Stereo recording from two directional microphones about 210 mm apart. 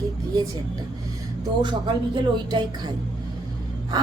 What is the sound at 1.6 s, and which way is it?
Speech, 20° right (ahead or behind).